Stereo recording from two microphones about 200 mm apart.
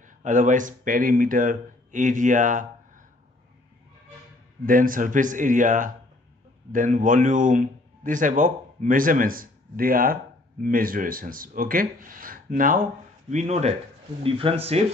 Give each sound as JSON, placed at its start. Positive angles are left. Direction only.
{"t": 0.0, "sound": "speech", "side_deg": -40}
{"t": 4.6, "sound": "a man's voice", "side_deg": -45}